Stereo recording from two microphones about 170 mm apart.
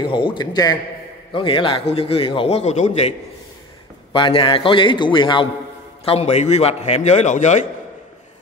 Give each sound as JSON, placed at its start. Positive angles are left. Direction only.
{"t": 0.0, "sound": "a man's voice", "side_deg": 30}